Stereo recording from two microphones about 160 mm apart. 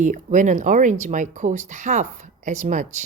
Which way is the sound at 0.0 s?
50° right (ahead or behind).